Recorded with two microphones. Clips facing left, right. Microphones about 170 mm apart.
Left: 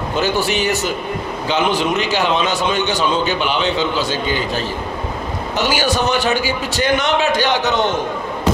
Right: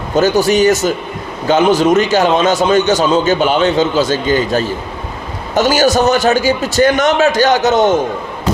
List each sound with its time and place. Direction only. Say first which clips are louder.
0.1 s a man's voice: right 8 dB; 45° right (ahead or behind)